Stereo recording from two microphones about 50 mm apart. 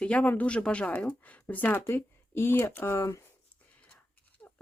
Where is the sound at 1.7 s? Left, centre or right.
Left.